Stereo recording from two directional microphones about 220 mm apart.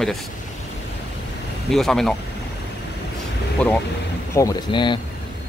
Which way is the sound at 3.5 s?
5° left (ahead or behind).